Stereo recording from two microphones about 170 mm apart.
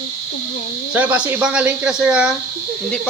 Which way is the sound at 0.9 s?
10° right (ahead or behind).